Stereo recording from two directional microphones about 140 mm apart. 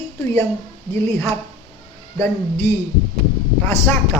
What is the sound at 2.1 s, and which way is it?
Speech, 15° left (ahead or behind).